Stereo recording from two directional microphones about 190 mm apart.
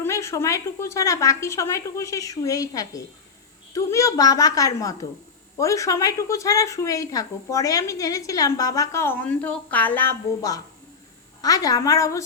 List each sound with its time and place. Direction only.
0.0 s a woman's voice: 15° left (ahead or behind)